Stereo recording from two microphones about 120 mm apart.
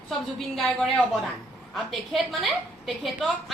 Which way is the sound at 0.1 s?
Centre (ahead or behind).